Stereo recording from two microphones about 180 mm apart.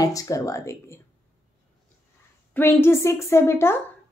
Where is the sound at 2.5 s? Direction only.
10° left (ahead or behind).